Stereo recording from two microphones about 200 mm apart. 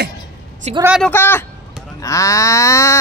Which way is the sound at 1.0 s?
10° left (ahead or behind).